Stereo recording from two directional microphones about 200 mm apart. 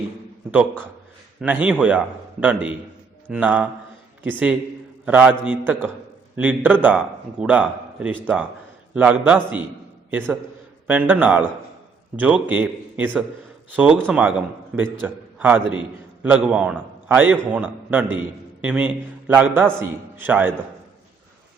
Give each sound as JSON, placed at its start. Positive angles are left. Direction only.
{"t": 1.4, "sound": "a man's voice", "side_deg": -5}
{"t": 10.8, "sound": "a man's voice", "side_deg": -10}